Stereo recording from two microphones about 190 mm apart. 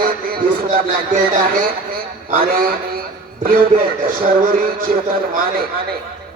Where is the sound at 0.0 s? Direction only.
50° right (ahead or behind).